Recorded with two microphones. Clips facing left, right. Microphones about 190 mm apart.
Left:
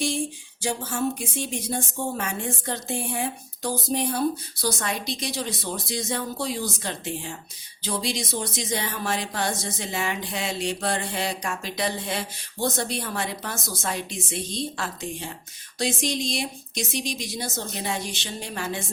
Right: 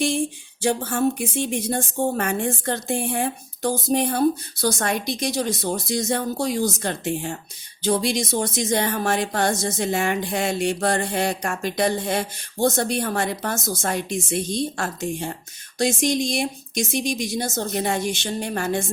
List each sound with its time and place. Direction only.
0.6 s speech: 55° right (ahead or behind)